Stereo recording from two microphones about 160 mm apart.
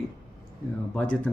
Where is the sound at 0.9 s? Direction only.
10° left (ahead or behind).